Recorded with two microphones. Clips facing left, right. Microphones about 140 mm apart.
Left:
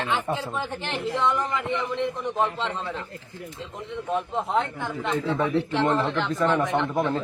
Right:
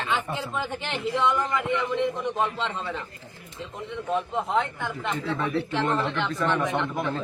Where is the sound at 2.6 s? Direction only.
Centre (ahead or behind).